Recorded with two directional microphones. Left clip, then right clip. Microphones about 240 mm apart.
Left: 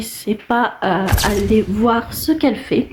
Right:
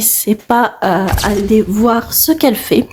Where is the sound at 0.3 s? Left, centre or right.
Right.